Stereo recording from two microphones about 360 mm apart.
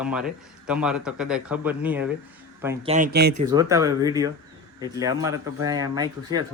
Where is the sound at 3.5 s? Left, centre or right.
Centre.